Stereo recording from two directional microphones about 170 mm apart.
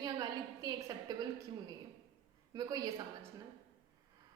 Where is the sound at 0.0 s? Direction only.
20° right (ahead or behind).